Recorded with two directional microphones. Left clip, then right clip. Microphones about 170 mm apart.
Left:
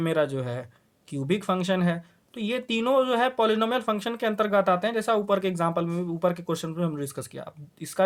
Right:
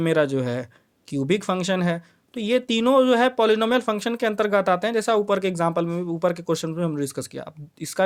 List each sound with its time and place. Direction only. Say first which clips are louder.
0.0 s speech: right 5 dB; 35° right (ahead or behind)